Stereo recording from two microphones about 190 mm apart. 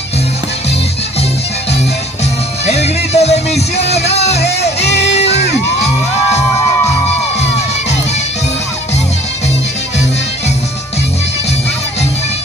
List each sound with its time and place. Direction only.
2.6 s music: 35° left (ahead or behind)
4.6 s music: 65° left (ahead or behind)